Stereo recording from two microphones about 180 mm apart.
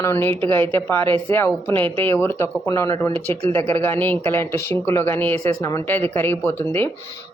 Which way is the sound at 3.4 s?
35° right (ahead or behind).